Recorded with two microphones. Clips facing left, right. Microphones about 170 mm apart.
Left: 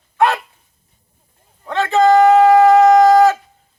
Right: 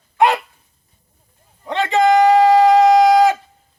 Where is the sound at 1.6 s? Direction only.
15° right (ahead or behind).